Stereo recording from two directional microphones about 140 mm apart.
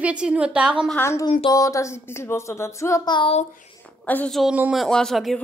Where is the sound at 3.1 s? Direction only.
40° left (ahead or behind).